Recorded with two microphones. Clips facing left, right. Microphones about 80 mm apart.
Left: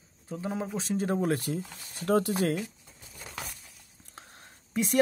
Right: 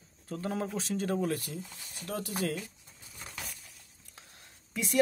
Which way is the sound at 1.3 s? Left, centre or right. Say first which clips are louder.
Left 6 dB; left.